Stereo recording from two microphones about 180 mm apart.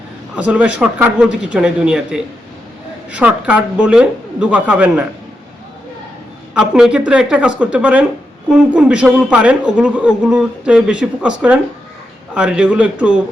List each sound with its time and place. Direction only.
0.3 s speech: 10° right (ahead or behind)
6.5 s speech: 5° right (ahead or behind)